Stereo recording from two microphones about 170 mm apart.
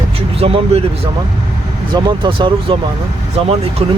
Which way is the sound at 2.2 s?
30° right (ahead or behind).